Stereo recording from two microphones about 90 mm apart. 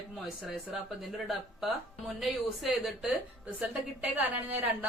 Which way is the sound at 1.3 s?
Centre (ahead or behind).